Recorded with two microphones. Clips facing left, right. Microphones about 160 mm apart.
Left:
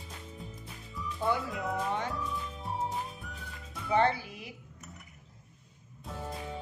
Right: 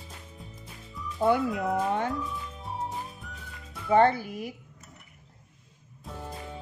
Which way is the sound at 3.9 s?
50° right (ahead or behind).